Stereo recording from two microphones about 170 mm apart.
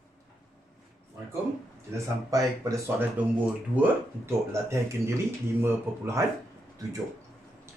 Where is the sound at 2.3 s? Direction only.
20° right (ahead or behind).